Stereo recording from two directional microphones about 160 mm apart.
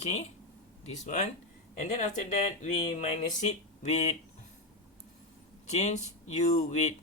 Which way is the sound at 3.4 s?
45° left (ahead or behind).